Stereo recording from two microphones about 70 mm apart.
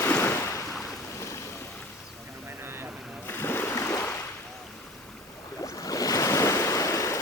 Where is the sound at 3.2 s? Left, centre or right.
Left.